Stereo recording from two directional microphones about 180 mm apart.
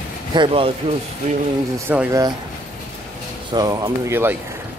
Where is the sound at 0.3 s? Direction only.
30° right (ahead or behind).